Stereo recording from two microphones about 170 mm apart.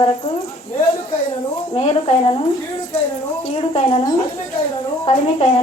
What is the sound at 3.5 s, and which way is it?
A woman's voice, 35° left (ahead or behind).